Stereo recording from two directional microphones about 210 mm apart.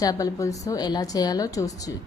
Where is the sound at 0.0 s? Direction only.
15° left (ahead or behind).